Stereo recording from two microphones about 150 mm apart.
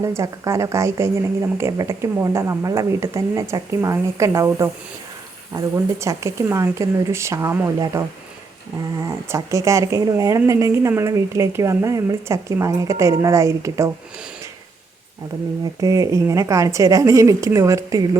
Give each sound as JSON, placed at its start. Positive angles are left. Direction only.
{"t": 0.0, "sound": "speech", "side_deg": -20}
{"t": 15.8, "sound": "speech", "side_deg": -20}